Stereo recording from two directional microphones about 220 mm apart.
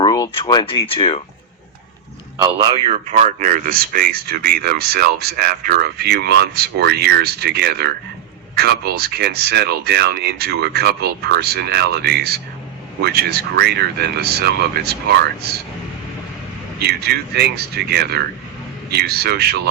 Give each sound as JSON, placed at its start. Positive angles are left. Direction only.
{"t": 0.0, "sound": "speech", "side_deg": 15}
{"t": 2.4, "sound": "speech", "side_deg": -20}
{"t": 2.9, "sound": "speech", "side_deg": -30}
{"t": 16.8, "sound": "speech", "side_deg": -45}